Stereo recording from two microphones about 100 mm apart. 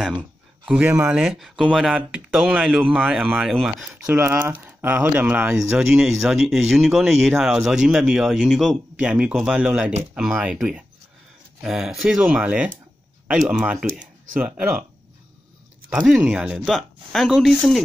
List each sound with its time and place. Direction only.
0.9 s speech: 10° right (ahead or behind)
4.1 s speech: 20° right (ahead or behind)
5.8 s speech: 5° right (ahead or behind)
15.9 s speech: 5° right (ahead or behind)